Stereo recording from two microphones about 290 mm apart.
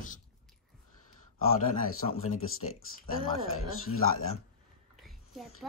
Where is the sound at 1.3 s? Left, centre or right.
Left.